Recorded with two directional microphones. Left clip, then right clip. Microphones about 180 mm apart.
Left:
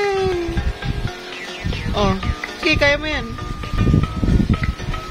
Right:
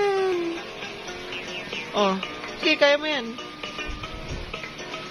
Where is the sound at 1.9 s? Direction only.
25° left (ahead or behind).